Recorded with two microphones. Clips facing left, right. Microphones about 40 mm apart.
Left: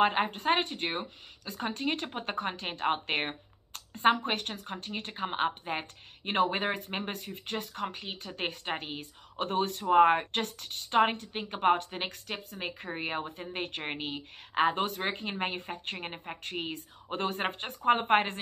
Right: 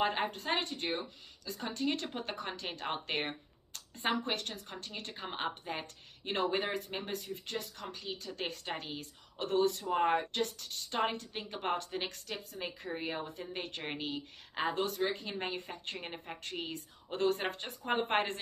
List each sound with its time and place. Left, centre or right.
0.0 s a woman's voice: left